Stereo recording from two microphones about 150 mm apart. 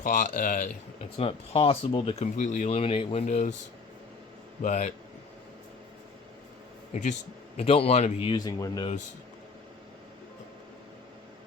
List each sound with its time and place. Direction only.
0.0 s speech: 60° left (ahead or behind)
1.2 s speech: 40° left (ahead or behind)
2.4 s speech: 50° left (ahead or behind)
3.2 s a man's voice: 55° left (ahead or behind)
4.6 s a man's voice: 50° left (ahead or behind)
6.9 s speech: 50° left (ahead or behind)
8.3 s speech: 25° left (ahead or behind)